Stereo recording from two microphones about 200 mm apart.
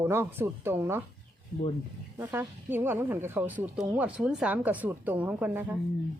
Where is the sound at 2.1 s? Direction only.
10° right (ahead or behind).